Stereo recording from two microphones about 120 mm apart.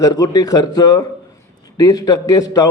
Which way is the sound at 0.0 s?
30° left (ahead or behind).